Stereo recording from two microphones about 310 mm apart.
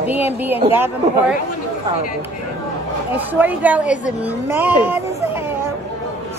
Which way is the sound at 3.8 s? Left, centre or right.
Left.